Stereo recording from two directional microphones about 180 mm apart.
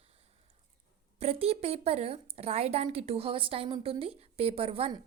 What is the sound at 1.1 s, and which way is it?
A woman's voice, 35° right (ahead or behind).